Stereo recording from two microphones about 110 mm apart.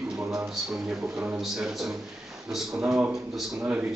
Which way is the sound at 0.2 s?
30° right (ahead or behind).